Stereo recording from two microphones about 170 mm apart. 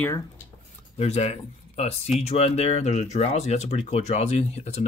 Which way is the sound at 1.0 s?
40° left (ahead or behind).